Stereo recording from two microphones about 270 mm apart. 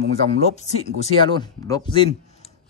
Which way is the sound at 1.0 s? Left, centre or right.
Centre.